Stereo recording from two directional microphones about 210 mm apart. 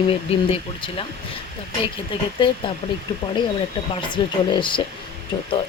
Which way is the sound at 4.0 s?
20° left (ahead or behind).